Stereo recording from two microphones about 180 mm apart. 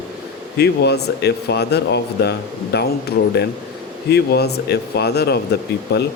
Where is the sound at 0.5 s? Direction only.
65° left (ahead or behind).